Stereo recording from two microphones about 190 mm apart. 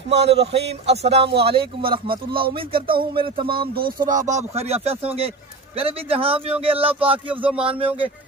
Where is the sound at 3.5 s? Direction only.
50° right (ahead or behind).